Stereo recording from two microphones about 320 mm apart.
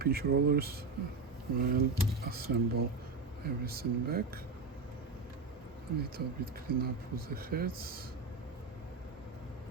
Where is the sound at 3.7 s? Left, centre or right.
Right.